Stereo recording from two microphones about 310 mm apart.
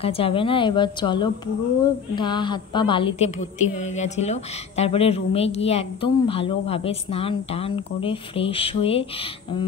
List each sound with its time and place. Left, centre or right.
0.0 s a woman's voice: centre